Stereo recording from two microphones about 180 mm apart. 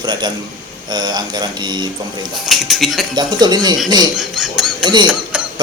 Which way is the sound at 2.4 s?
Centre (ahead or behind).